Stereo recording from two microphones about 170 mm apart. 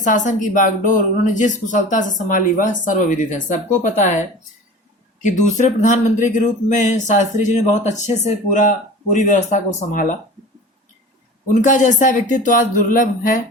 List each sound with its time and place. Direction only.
0.0 s speech: 45° left (ahead or behind)
11.4 s speech: 50° left (ahead or behind)